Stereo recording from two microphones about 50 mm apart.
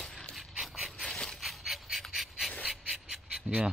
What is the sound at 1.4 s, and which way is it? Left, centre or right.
Dog, centre.